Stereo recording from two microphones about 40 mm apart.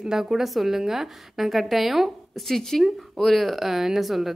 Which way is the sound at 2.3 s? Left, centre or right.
Centre.